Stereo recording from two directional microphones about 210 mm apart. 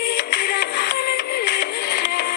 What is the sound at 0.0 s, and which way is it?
Music, 50° left (ahead or behind).